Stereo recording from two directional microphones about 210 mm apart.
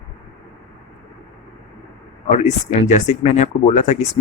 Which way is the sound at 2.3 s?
30° left (ahead or behind).